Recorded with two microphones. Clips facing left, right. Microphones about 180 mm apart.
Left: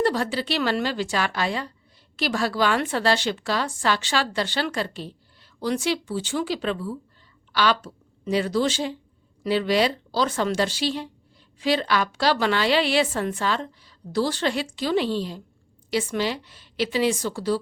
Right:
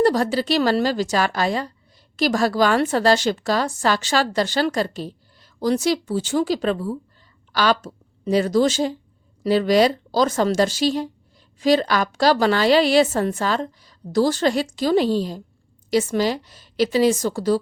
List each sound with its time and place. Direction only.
0.0 s a woman's voice: 40° right (ahead or behind)